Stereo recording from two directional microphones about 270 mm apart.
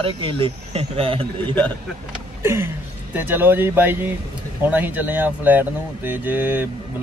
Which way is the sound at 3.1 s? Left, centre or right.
Centre.